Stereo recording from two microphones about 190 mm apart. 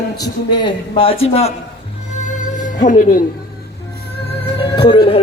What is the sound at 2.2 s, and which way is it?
Music, 40° left (ahead or behind).